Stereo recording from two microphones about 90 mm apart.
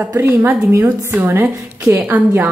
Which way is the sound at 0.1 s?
25° right (ahead or behind).